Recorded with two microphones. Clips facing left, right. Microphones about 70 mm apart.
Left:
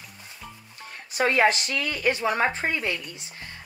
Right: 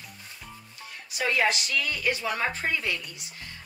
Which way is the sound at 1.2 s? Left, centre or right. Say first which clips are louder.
Left 5 dB; left.